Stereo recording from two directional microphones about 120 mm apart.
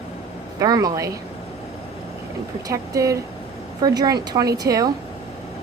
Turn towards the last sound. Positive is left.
turn(degrees=-30)  # may be behind; listen again after turning